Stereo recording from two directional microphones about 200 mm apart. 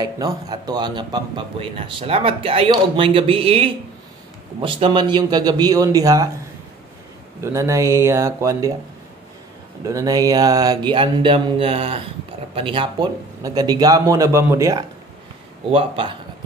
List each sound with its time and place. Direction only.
0.0 s speech: 20° right (ahead or behind)
7.4 s speech: 15° right (ahead or behind)
9.8 s speech: 15° right (ahead or behind)